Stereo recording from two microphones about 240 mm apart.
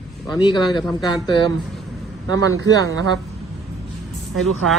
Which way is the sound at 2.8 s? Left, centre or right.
Right.